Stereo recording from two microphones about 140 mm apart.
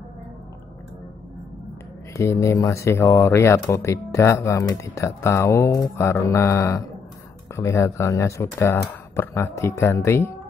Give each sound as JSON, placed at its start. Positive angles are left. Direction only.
{"t": 2.1, "sound": "speech", "side_deg": 20}